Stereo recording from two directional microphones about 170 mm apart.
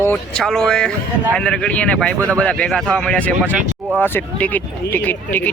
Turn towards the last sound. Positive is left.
turn(degrees=10)  # may be behind; listen again after turning